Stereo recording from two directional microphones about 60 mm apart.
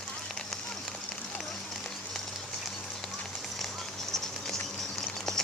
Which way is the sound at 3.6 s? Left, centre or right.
Centre.